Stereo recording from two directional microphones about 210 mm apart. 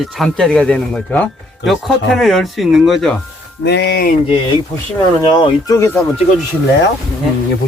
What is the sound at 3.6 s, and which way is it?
Speech, 50° left (ahead or behind).